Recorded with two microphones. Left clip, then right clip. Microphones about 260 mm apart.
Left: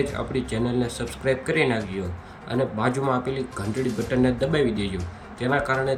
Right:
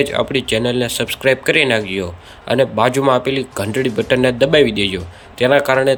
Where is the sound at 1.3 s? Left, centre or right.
Centre.